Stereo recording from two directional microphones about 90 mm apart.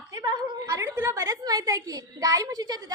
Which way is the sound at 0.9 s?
25° right (ahead or behind).